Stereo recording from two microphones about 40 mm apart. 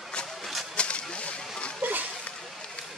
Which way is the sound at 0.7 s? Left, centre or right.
Left.